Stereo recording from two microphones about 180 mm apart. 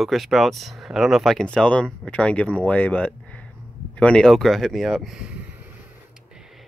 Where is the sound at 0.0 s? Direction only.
Centre (ahead or behind).